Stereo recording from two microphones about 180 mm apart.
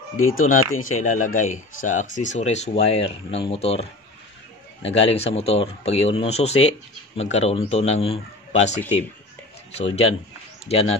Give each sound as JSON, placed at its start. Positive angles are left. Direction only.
{"t": 0.4, "sound": "speech", "side_deg": 45}
{"t": 4.9, "sound": "speech", "side_deg": 35}